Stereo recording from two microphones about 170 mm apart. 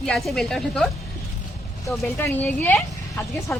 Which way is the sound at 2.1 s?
10° left (ahead or behind).